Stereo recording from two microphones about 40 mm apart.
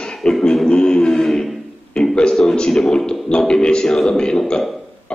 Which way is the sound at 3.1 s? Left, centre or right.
Left.